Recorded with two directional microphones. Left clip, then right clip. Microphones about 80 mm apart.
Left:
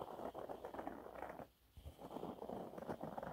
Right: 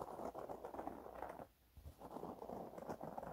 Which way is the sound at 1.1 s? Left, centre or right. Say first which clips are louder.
Even; left.